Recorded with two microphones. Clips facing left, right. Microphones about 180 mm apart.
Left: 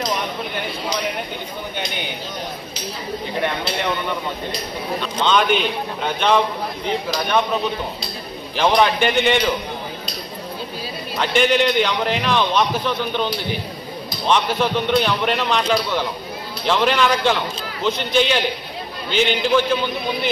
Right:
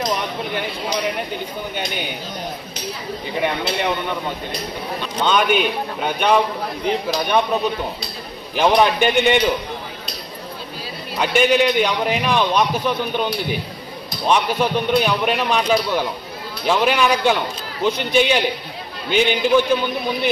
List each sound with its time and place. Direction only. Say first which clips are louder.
3.3 s a man's voice: right 2 dB; 10° right (ahead or behind)
5.2 s a man's voice: right 1 dB; 10° right (ahead or behind)
8.5 s a man's voice: right 1 dB; 15° right (ahead or behind)
11.1 s a man's voice: right 1 dB; 10° right (ahead or behind)